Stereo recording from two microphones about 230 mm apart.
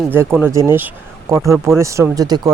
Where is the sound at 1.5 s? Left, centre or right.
Centre.